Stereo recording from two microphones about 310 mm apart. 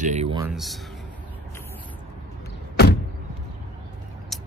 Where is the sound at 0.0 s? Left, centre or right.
Right.